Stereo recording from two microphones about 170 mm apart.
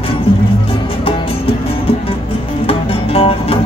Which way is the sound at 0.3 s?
30° left (ahead or behind).